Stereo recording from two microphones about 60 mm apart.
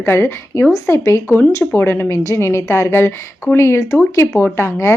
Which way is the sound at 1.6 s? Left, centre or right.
Left.